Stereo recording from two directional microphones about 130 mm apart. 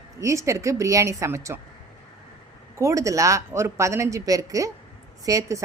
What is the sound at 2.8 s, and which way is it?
A woman's voice, 25° right (ahead or behind).